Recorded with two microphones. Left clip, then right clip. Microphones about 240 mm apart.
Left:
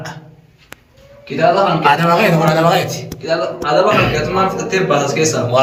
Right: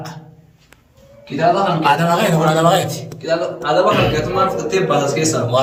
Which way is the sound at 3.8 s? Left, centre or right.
Centre.